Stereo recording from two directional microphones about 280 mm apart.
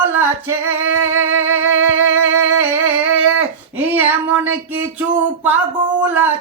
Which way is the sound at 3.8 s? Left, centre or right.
Centre.